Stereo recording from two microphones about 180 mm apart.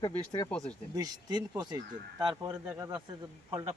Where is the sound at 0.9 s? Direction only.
20° right (ahead or behind).